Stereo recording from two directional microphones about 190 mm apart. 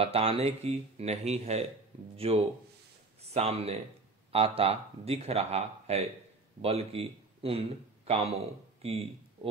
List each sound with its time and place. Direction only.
0.0 s speech: 30° right (ahead or behind)